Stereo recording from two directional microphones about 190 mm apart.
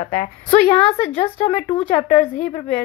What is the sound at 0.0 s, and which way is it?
A woman's voice, 35° left (ahead or behind).